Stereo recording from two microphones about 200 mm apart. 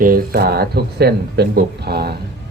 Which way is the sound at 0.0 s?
50° right (ahead or behind).